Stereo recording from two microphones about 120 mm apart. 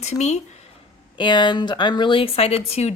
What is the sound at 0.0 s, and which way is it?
Speech, 70° left (ahead or behind).